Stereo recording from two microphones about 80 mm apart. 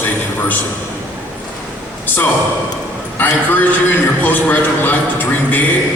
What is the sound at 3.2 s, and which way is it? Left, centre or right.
A man's voice, left.